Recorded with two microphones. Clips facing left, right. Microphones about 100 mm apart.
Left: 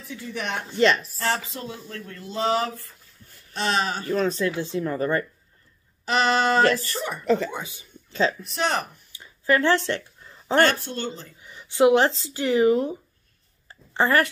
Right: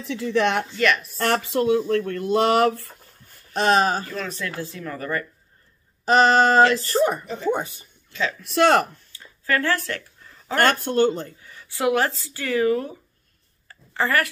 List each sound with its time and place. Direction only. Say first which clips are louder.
0.0 s speech: right 11 dB; 85° right
0.7 s a woman's voice: left 2 dB; 25° left (ahead or behind)
1.5 s speech: right 16 dB; 70° right (ahead or behind); by 4.1 s 40° right (ahead or behind)
4.1 s a woman's voice: left 7 dB; 30° left (ahead or behind)
6.0 s a sound: right 5 dB; 40° right (ahead or behind)
6.8 s speech: right 10 dB; 45° right (ahead or behind)
8.1 s speech: left 4 dB; 35° left (ahead or behind)
8.5 s speech: right 8 dB; 65° right (ahead or behind)
8.9 s a sound: right 1 dB; 15° left (ahead or behind)
10.6 s speech: right 4 dB; 50° right (ahead or behind)
11.4 s a woman's voice: left 6 dB; 20° left (ahead or behind)
13.7 s a sound: left 2 dB; 25° left (ahead or behind)